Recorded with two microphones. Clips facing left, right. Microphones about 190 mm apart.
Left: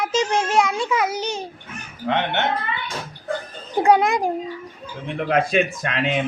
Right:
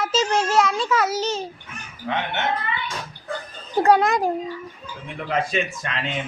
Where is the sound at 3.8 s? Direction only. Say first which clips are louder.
Left 1 dB; 15° left (ahead or behind).